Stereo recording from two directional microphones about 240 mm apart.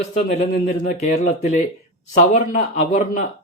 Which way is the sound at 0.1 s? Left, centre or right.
Left.